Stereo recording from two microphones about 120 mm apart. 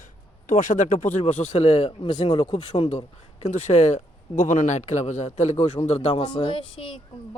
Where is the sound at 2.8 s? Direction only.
65° left (ahead or behind).